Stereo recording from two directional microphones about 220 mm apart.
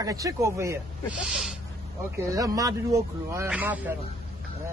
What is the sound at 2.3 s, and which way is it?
Speech, 15° right (ahead or behind).